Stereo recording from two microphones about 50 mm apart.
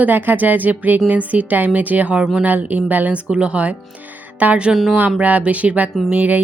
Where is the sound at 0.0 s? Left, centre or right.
Right.